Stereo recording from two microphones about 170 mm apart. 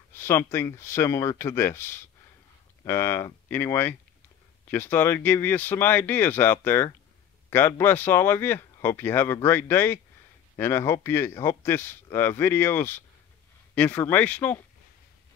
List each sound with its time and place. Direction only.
0.1 s speech: 15° left (ahead or behind)